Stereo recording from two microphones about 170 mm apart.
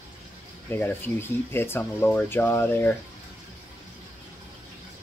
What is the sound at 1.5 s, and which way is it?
Speech, 15° left (ahead or behind).